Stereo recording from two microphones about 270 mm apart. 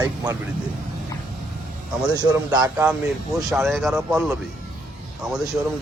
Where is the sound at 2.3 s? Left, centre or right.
Centre.